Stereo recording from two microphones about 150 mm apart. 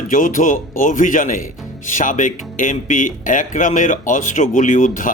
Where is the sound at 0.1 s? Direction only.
60° left (ahead or behind).